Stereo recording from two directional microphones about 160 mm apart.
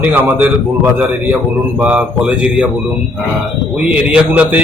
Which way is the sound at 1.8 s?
5° right (ahead or behind).